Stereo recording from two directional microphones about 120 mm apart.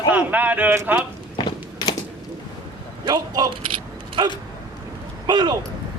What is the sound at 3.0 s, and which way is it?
Speech, 35° right (ahead or behind).